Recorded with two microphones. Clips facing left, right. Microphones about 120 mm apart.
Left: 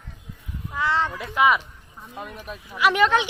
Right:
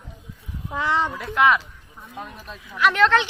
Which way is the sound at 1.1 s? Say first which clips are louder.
Right 2 dB; centre (ahead or behind).